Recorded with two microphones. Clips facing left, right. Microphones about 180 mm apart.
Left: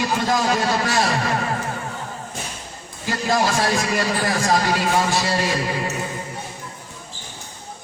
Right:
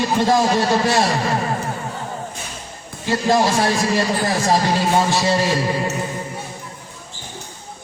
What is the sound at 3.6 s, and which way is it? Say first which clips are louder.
A man's voice: right 3 dB; 30° right (ahead or behind).